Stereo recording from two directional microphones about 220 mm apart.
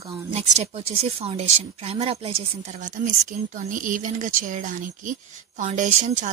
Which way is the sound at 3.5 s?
35° right (ahead or behind).